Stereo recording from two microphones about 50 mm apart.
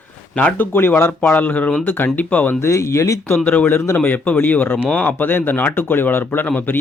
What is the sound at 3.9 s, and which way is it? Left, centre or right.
Speech, left.